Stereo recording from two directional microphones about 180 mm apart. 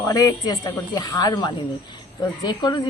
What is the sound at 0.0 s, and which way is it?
A woman's voice, 20° left (ahead or behind).